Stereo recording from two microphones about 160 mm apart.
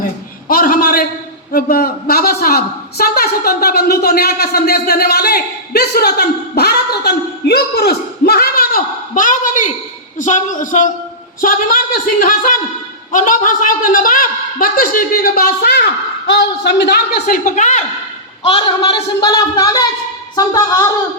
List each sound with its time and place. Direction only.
0.0 s a sound: 60° left (ahead or behind)
1.5 s a woman's voice: 70° left (ahead or behind); by 17.8 s 50° left (ahead or behind)
18.4 s a woman's voice: 35° left (ahead or behind)
19.2 s speech: 25° left (ahead or behind)